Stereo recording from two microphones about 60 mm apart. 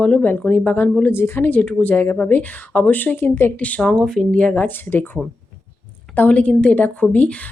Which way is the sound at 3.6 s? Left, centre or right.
Centre.